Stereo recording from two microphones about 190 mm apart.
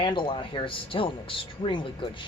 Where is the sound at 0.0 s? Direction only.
25° left (ahead or behind).